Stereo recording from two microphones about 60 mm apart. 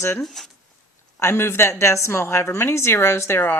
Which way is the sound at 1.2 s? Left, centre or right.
Left.